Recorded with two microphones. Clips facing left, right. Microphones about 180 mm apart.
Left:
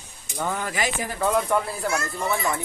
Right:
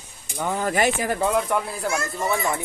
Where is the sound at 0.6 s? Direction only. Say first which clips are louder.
Right 6 dB; 50° right (ahead or behind).